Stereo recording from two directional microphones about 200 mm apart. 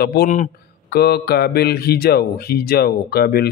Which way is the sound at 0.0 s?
50° left (ahead or behind).